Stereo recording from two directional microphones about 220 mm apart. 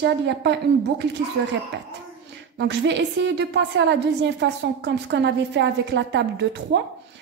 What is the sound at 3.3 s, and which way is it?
A woman's voice, 50° right (ahead or behind).